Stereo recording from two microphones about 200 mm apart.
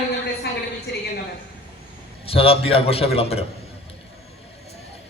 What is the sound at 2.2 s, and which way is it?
A man's voice, 30° left (ahead or behind).